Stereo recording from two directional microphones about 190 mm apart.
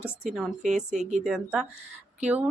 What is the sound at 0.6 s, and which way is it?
Speech, 40° right (ahead or behind).